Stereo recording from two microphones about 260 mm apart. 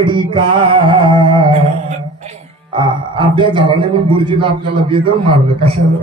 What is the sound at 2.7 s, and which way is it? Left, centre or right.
A man's voice, centre.